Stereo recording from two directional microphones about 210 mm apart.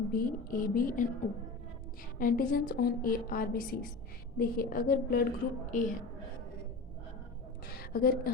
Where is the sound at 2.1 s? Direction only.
40° left (ahead or behind).